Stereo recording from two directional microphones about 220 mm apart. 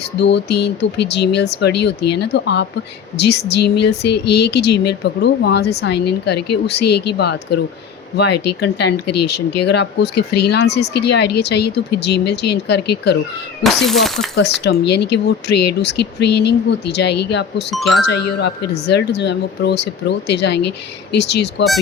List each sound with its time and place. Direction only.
0.2 s speech: 50° left (ahead or behind)
13.6 s speech: centre (ahead or behind)
14.3 s speech: 50° left (ahead or behind)
17.7 s speech: centre (ahead or behind)
18.0 s speech: 50° left (ahead or behind)